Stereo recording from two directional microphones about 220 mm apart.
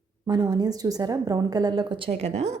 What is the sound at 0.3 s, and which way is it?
A woman's voice, 20° right (ahead or behind).